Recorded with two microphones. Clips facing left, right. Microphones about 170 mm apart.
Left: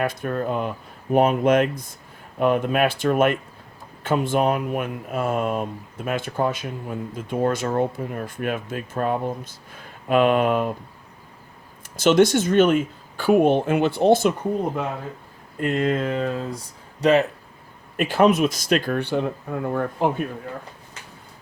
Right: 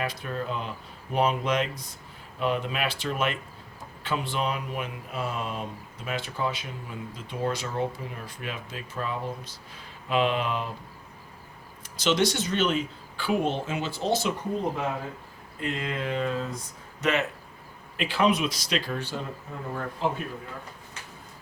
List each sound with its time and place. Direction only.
0.0 s speech: 50° left (ahead or behind)
11.9 s speech: 50° left (ahead or behind)
15.6 s speech: 50° left (ahead or behind)
17.9 s speech: 45° left (ahead or behind)